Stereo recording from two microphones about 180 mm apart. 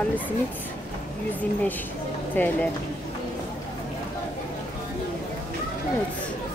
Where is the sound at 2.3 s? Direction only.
10° left (ahead or behind).